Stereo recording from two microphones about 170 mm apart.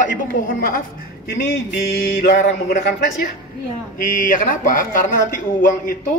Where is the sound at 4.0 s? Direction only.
55° left (ahead or behind).